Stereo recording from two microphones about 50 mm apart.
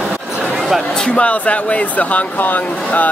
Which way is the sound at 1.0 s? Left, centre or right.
Left.